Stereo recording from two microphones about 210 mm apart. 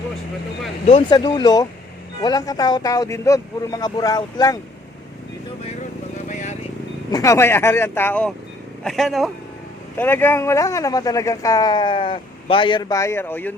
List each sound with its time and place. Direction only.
0.9 s speech: 25° left (ahead or behind)
6.2 s vehicle: 35° left (ahead or behind)
7.1 s speech: 15° left (ahead or behind)